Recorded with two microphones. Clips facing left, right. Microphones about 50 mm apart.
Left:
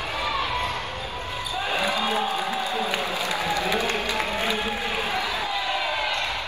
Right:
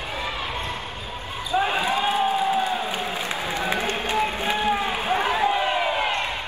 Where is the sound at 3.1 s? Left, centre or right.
Right.